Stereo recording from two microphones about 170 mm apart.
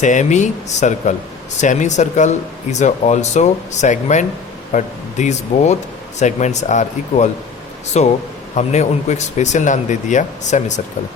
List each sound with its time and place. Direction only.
0.0 s speech: 45° left (ahead or behind)